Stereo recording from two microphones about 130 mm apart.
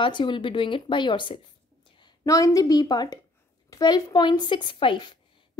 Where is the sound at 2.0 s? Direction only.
25° left (ahead or behind).